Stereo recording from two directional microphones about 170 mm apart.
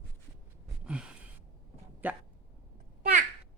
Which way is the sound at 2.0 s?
10° right (ahead or behind).